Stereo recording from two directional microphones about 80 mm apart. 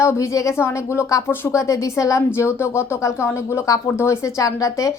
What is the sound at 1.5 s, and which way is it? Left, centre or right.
Speech, left.